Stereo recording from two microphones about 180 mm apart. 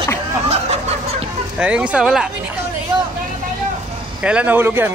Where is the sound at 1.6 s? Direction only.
5° right (ahead or behind).